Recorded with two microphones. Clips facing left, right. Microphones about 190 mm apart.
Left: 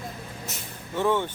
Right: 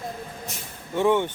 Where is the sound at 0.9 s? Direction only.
15° right (ahead or behind).